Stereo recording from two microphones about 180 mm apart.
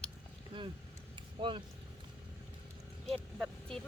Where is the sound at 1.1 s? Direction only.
25° right (ahead or behind).